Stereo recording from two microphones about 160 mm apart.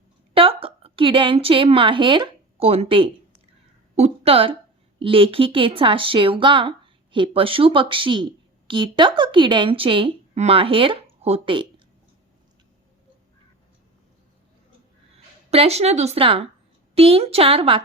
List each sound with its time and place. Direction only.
0.3 s a woman's voice: 35° right (ahead or behind)
15.4 s speech: 40° right (ahead or behind)